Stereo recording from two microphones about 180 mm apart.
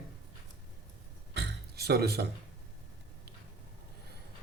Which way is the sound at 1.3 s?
70° right (ahead or behind).